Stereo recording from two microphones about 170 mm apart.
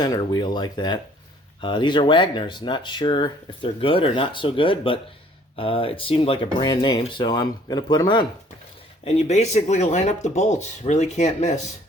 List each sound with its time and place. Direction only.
0.0 s speech: 25° left (ahead or behind)
9.0 s speech: 40° left (ahead or behind)